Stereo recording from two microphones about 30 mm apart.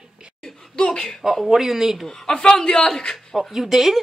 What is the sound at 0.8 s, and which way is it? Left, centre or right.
Speech, left.